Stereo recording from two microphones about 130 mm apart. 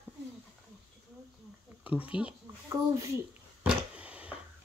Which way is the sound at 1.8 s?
10° right (ahead or behind).